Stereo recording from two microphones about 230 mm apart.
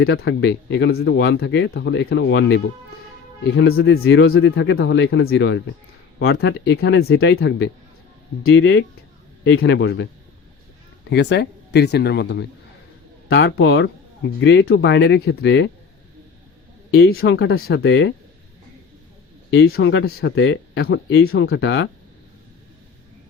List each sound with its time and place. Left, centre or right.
0.0 s speech: left
6.7 s speech: left
8.4 s speech: left
11.1 s speech: left
17.1 s speech: left
19.5 s speech: left
21.2 s speech: left